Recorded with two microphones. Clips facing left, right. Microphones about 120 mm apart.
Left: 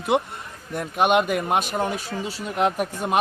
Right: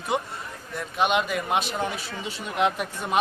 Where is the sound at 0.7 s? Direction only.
50° left (ahead or behind).